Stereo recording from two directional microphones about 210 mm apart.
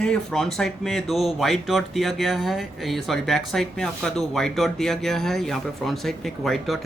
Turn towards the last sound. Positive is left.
turn(degrees=0)  # may be behind; listen again after turning